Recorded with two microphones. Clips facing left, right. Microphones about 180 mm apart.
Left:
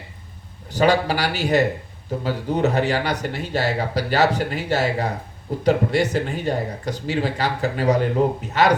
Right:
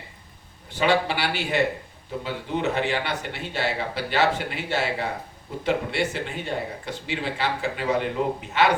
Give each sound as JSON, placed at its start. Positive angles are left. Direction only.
{"t": 0.7, "sound": "speech", "side_deg": 40}